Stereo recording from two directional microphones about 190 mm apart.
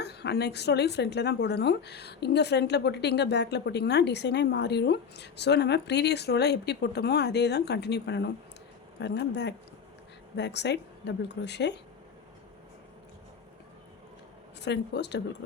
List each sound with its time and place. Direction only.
0.0 s speech: 60° left (ahead or behind)
14.6 s speech: 65° left (ahead or behind)